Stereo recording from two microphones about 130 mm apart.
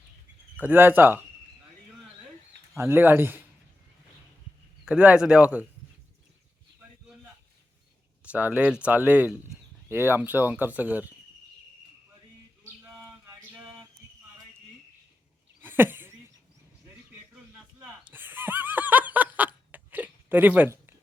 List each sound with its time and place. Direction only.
0.5 s speech: 15° right (ahead or behind)
2.7 s speech: 20° right (ahead or behind)
4.9 s speech: 10° right (ahead or behind)
8.2 s speech: 10° right (ahead or behind)
13.0 s bird: 20° right (ahead or behind)
15.6 s a sound: 15° right (ahead or behind)
18.0 s snicker: 15° right (ahead or behind)